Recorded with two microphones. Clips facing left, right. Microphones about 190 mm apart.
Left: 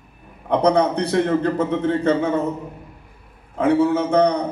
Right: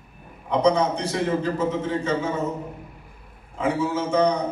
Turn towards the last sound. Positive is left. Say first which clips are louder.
# left 4 dB
turn(degrees=60)  # may be behind; listen again after turning